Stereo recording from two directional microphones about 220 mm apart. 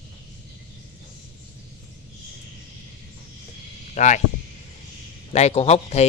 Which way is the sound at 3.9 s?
35° left (ahead or behind).